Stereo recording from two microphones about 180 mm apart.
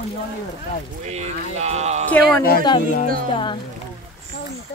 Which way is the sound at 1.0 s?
40° right (ahead or behind).